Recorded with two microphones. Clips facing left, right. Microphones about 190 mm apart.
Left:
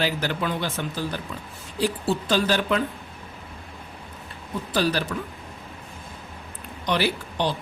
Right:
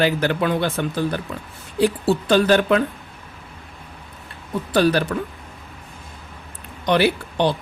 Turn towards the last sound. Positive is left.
turn(degrees=-60)  # may be behind; listen again after turning